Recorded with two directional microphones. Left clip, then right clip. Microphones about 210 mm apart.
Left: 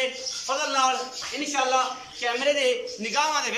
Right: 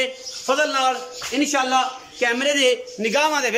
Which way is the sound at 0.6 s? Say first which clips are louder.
Right 2 dB; 45° right (ahead or behind).